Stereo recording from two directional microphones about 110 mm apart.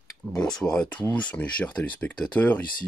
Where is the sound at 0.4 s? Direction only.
5° left (ahead or behind).